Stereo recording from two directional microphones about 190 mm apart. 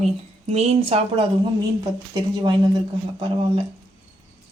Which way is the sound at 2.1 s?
20° right (ahead or behind).